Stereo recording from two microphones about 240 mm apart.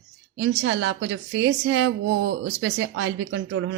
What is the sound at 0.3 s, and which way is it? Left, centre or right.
A woman's voice, right.